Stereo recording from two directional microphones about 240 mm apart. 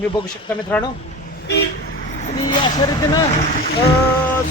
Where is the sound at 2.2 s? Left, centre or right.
Left.